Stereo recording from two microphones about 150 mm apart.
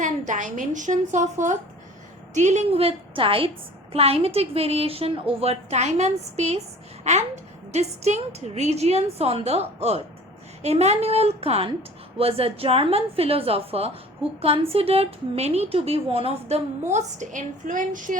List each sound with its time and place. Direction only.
0.0 s a woman's voice: 55° right (ahead or behind)